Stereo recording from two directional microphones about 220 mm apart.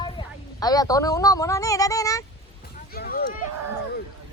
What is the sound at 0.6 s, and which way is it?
Speech, 15° left (ahead or behind).